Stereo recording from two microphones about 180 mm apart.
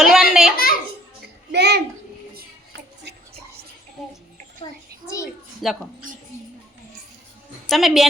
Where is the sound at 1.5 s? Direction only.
65° right (ahead or behind).